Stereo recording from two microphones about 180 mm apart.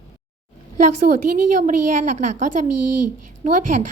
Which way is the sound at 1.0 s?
45° right (ahead or behind).